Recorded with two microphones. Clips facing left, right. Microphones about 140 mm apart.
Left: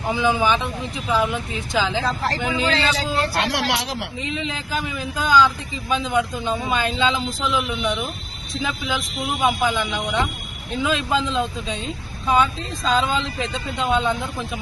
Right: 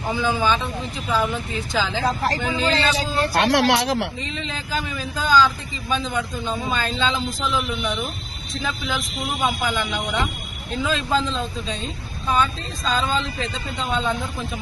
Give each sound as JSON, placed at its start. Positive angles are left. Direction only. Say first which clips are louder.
{"t": 0.1, "sound": "a man's voice", "louder": "left 2 dB", "side_deg": 15}
{"t": 2.0, "sound": "speech", "louder": "right 2 dB", "side_deg": -15}
{"t": 2.4, "sound": "a man's voice", "louder": "even", "side_deg": 15}
{"t": 2.7, "sound": "speech", "louder": "even", "side_deg": -15}
{"t": 3.4, "sound": "speech", "louder": "right 5 dB", "side_deg": -55}
{"t": 4.2, "sound": "a man's voice", "louder": "left 3 dB", "side_deg": 10}
{"t": 9.4, "sound": "a man's voice", "louder": "left 3 dB", "side_deg": 10}
{"t": 9.9, "sound": "speech", "louder": "left 1 dB", "side_deg": -5}
{"t": 10.8, "sound": "a man's voice", "louder": "left 1 dB", "side_deg": 15}